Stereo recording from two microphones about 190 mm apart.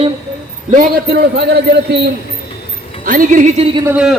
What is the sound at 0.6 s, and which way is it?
Speech, 45° right (ahead or behind).